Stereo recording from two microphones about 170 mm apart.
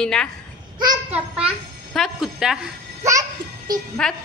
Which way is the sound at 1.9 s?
Centre (ahead or behind).